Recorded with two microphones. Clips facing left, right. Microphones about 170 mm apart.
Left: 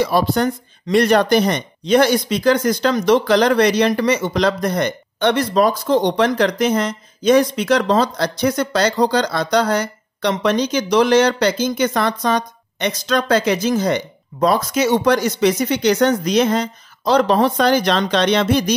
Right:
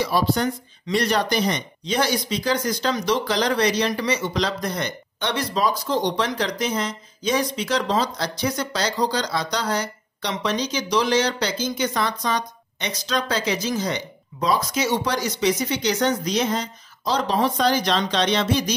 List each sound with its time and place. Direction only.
0.0 s speech: 55° left (ahead or behind)